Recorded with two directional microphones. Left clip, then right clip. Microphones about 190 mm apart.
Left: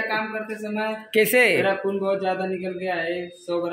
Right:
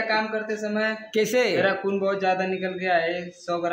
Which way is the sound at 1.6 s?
15° right (ahead or behind).